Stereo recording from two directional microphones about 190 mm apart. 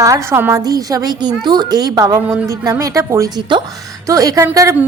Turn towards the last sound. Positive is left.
turn(degrees=-15)  # may be behind; listen again after turning